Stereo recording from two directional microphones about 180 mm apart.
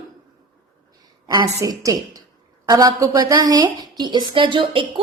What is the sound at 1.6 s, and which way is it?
A woman's voice, 20° right (ahead or behind).